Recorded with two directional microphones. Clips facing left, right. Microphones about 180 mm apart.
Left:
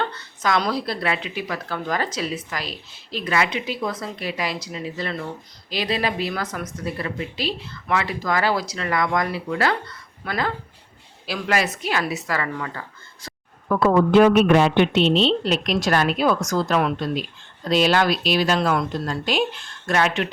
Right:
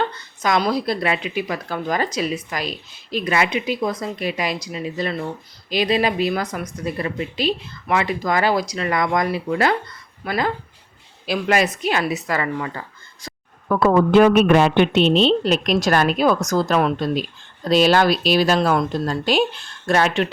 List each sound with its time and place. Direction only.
0.0 s a sound: 15° right (ahead or behind)
0.6 s a woman's voice: 15° right (ahead or behind)
13.7 s speech: 50° right (ahead or behind); by 20.2 s 35° right (ahead or behind)